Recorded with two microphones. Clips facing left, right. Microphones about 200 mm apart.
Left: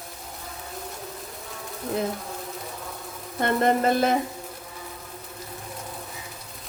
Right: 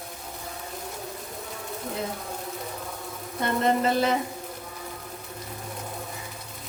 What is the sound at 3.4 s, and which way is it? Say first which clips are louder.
Sizzle: left 2 dB; 50° left (ahead or behind).